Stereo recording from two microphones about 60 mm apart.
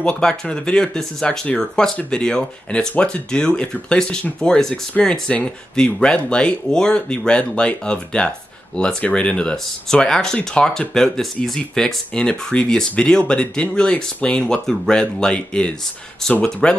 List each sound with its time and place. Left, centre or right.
0.0 s speech: centre
4.9 s speech: left